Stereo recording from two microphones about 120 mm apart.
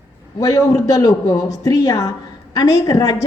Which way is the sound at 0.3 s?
30° left (ahead or behind).